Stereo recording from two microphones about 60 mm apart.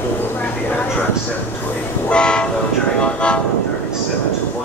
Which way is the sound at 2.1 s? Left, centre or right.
Centre.